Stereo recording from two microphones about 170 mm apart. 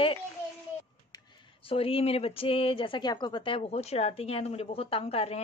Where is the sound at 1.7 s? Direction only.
35° left (ahead or behind).